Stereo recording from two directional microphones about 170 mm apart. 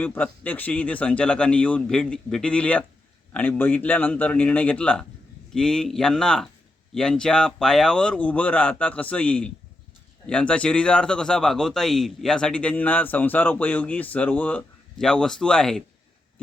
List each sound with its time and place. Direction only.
0.0 s speech: 10° left (ahead or behind)